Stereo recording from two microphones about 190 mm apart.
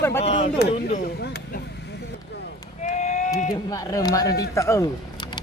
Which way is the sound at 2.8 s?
40° left (ahead or behind).